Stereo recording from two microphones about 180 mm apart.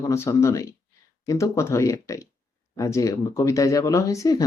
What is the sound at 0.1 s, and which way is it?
Speech, 15° left (ahead or behind).